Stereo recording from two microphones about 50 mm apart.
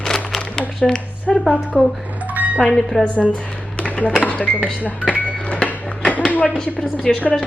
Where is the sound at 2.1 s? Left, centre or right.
Right.